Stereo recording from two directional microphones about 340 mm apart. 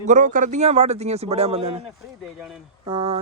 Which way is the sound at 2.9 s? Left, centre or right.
Centre.